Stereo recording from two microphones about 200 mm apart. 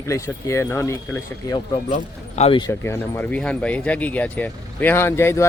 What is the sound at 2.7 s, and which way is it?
Speech, 10° left (ahead or behind).